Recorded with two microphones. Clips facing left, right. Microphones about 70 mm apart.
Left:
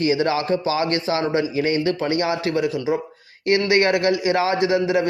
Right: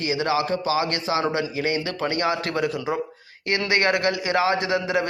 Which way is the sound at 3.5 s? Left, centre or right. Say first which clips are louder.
Left 4 dB; right.